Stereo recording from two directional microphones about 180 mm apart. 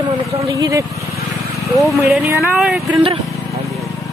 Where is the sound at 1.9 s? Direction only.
Centre (ahead or behind).